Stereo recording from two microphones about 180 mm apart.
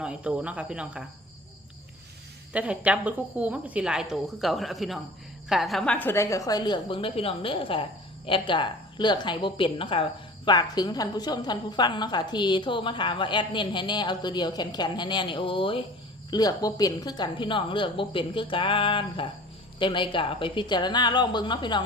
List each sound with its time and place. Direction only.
0.0 s speech: 5° right (ahead or behind)
2.5 s a woman's voice: 5° right (ahead or behind); by 21.8 s 25° left (ahead or behind)